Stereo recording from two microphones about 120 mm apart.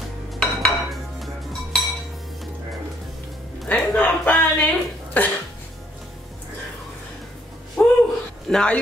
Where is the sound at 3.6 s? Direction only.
10° left (ahead or behind).